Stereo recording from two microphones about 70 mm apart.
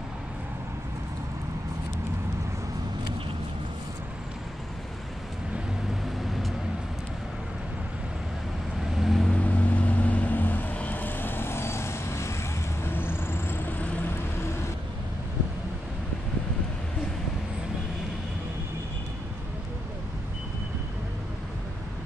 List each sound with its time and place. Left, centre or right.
8.9 s vehicle: centre
9.3 s vehicle: left